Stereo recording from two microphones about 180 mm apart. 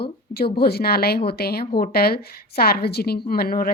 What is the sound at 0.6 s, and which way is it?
A woman's voice, 60° left (ahead or behind).